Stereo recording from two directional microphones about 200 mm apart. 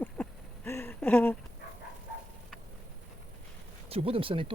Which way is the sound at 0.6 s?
10° left (ahead or behind).